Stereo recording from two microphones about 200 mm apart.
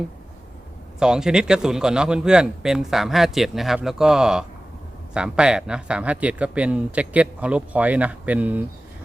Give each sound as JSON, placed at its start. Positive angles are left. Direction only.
{"t": 0.9, "sound": "a man's voice", "side_deg": -5}